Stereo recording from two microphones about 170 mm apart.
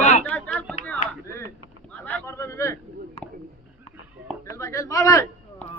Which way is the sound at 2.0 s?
15° left (ahead or behind).